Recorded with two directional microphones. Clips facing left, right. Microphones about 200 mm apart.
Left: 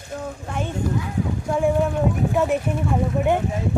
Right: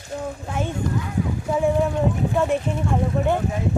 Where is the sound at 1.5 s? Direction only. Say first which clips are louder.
Even; centre (ahead or behind).